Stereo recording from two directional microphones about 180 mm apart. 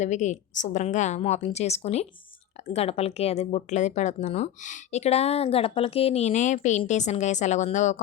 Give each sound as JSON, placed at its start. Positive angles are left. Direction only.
{"t": 0.0, "sound": "speech", "side_deg": 40}